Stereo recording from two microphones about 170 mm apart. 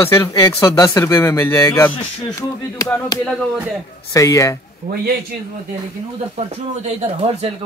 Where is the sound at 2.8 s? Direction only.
20° left (ahead or behind).